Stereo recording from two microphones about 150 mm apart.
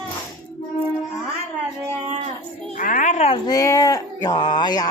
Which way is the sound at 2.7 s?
60° left (ahead or behind).